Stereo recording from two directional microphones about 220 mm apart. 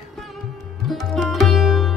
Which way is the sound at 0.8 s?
Centre (ahead or behind).